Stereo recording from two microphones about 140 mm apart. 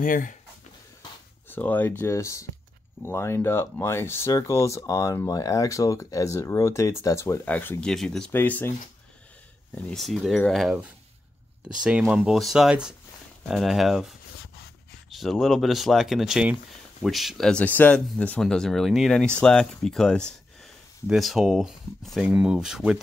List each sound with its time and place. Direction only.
0.0 s speech: 70° left (ahead or behind)
1.5 s speech: 10° left (ahead or behind)
8.3 s speech: 15° left (ahead or behind)
9.8 s speech: 5° left (ahead or behind)
11.8 s speech: 5° right (ahead or behind)